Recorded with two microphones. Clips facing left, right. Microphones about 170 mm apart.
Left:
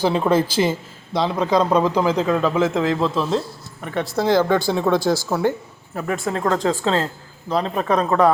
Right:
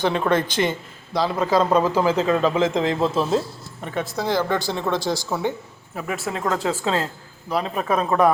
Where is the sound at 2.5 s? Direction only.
5° left (ahead or behind).